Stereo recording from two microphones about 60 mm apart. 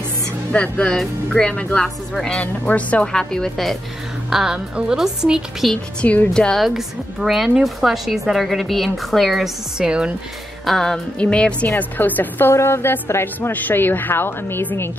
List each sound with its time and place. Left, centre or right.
0.5 s speech: centre
2.4 s speech: left
3.1 s speech: centre
4.3 s a woman's voice: centre
5.9 s speech: left
6.3 s speech: centre
6.6 s a woman's voice: centre
9.8 s speech: centre
10.6 s music: centre
11.1 s speech: centre
11.7 s a woman's voice: left
12.5 s a woman's voice: left
13.5 s a woman's voice: left